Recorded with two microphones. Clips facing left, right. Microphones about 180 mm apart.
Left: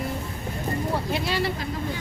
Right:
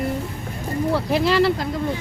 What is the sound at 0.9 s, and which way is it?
Speech, 80° right.